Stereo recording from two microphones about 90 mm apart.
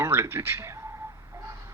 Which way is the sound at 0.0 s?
30° right (ahead or behind).